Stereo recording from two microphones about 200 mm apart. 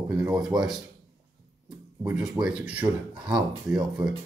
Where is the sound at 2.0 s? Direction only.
5° right (ahead or behind).